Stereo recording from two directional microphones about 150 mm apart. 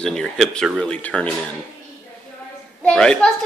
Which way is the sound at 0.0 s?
5° left (ahead or behind).